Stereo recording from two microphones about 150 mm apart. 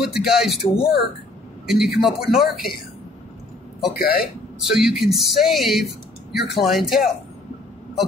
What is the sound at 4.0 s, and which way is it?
Speech, 80° left.